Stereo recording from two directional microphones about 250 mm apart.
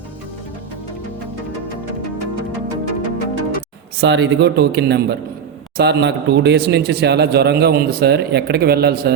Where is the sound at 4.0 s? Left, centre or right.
Right.